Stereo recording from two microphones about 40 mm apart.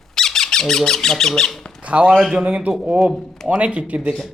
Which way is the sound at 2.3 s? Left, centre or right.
Right.